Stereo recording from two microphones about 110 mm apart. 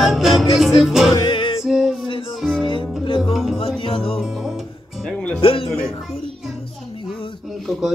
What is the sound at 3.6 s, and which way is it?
Music, 55° left (ahead or behind).